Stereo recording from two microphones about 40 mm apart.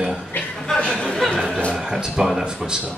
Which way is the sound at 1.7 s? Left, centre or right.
Centre.